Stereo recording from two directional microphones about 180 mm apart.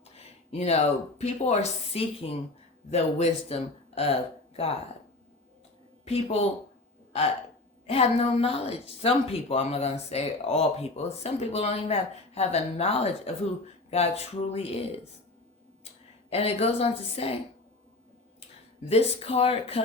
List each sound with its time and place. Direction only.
0.0 s speech: 35° left (ahead or behind)
6.1 s a woman's voice: 35° left (ahead or behind)
7.9 s a woman's voice: 35° left (ahead or behind)
16.3 s a woman's voice: 35° left (ahead or behind)
18.3 s speech: 35° left (ahead or behind)